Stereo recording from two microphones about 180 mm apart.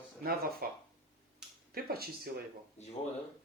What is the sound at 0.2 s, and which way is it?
Speech, 55° right (ahead or behind).